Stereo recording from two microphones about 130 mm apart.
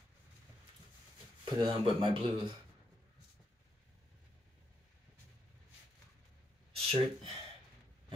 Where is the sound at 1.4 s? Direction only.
35° right (ahead or behind).